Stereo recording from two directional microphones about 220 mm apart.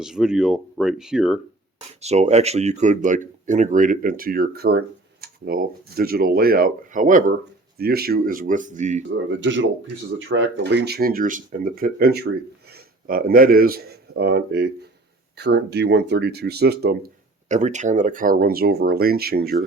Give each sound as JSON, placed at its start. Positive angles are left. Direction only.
{"t": 0.0, "sound": "speech", "side_deg": -5}
{"t": 2.0, "sound": "speech", "side_deg": -30}
{"t": 9.3, "sound": "speech", "side_deg": -55}
{"t": 17.5, "sound": "speech", "side_deg": -30}